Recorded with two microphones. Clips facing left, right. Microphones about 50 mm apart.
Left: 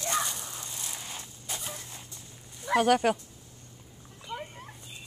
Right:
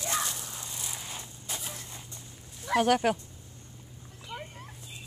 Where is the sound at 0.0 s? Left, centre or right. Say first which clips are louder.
Left 2 dB; centre.